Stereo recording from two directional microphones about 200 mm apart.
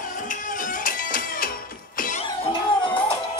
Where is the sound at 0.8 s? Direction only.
45° left (ahead or behind).